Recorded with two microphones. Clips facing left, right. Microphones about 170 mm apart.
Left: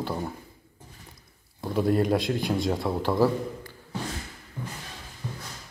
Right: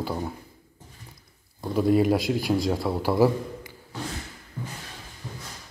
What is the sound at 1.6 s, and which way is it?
A man's voice, centre (ahead or behind).